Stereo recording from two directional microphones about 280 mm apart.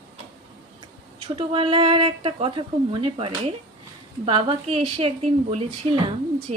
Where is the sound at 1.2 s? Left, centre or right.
Centre.